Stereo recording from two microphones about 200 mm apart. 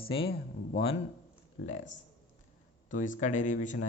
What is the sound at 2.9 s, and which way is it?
Speech, 40° left (ahead or behind).